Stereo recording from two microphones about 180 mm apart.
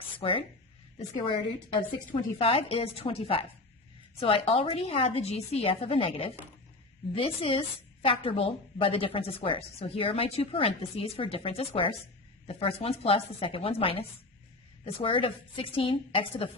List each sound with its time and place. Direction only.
0.2 s speech: 30° left (ahead or behind)
2.4 s a woman's voice: 30° left (ahead or behind)